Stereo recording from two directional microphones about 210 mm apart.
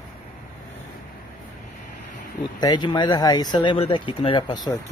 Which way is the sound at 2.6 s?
20° left (ahead or behind).